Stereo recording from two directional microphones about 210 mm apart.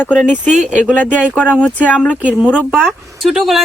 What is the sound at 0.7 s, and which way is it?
Speech, 5° left (ahead or behind).